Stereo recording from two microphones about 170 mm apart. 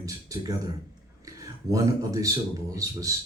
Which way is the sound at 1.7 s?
20° right (ahead or behind).